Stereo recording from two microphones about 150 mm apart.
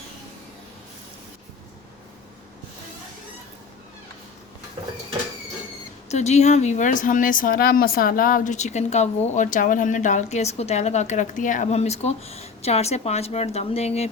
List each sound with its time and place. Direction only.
6.1 s speech: 50° left (ahead or behind)